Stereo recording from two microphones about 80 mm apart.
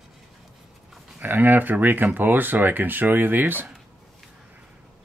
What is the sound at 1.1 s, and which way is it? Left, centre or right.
Speech, right.